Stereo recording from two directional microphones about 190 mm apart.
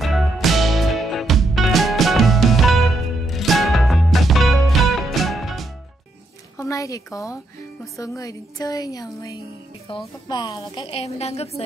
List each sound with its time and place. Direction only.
0.0 s music: centre (ahead or behind)
6.6 s a woman's voice: 15° left (ahead or behind); by 11.6 s 35° left (ahead or behind)